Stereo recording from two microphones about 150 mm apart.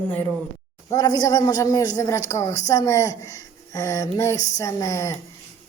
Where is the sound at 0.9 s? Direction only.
25° left (ahead or behind).